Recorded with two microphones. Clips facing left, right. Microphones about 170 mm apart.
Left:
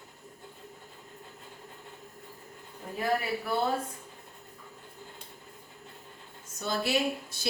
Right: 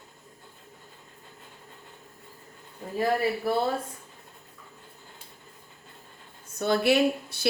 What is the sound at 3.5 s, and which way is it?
Speech, 35° right (ahead or behind).